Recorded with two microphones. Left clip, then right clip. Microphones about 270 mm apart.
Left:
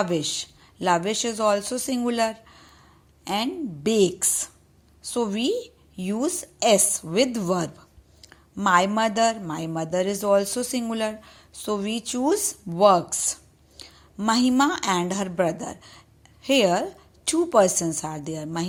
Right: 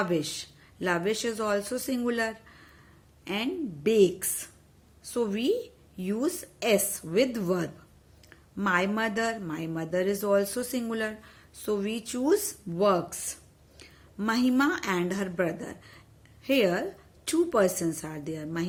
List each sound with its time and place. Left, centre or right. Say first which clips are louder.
0.0 s a woman's voice: left 4 dB; centre